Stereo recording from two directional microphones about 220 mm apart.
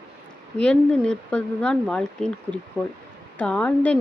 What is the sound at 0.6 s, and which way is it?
Speech, 5° left (ahead or behind).